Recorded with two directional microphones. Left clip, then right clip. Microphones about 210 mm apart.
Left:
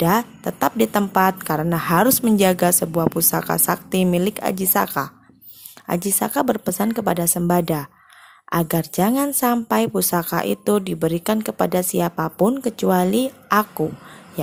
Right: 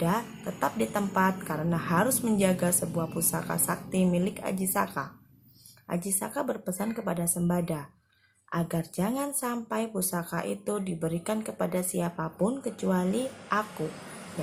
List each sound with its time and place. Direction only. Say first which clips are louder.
0.0 s speech: left 11 dB; 45° left (ahead or behind)